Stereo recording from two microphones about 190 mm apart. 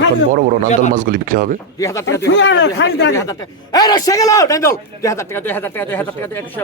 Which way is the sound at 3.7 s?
20° left (ahead or behind).